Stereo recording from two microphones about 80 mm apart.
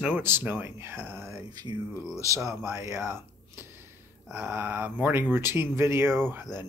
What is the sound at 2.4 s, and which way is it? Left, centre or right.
Speech, right.